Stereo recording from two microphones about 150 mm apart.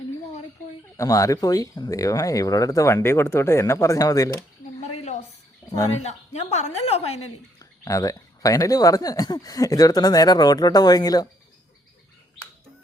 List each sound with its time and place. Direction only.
0.9 s speech: 20° left (ahead or behind)
5.6 s a sound: 30° left (ahead or behind)
6.0 s a woman's voice: 50° left (ahead or behind)
7.6 s speech: 20° left (ahead or behind)